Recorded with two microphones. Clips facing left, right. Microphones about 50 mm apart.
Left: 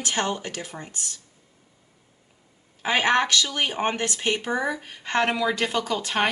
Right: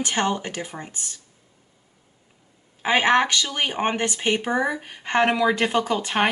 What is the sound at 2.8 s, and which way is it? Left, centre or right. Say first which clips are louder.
Speech: right 3 dB; centre.